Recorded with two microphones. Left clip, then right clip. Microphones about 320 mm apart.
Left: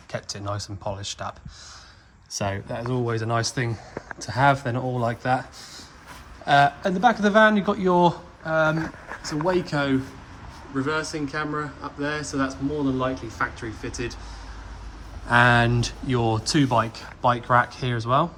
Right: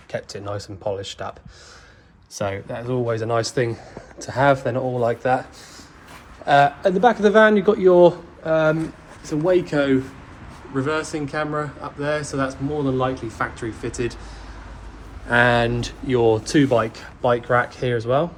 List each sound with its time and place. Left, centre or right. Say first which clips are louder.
0.1 s speech: right 3 dB; centre
10.8 s speech: right 3 dB; centre
15.3 s speech: right 1 dB; centre